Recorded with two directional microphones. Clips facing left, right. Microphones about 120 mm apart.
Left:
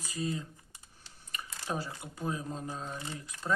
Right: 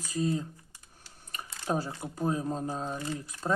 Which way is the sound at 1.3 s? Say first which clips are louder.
Right 5 dB; 40° right (ahead or behind).